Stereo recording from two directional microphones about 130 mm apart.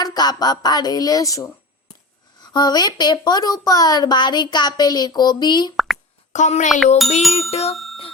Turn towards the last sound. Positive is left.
turn(degrees=0)  # may be behind; listen again after turning